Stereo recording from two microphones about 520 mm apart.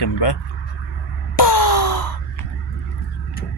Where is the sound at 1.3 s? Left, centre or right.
Left.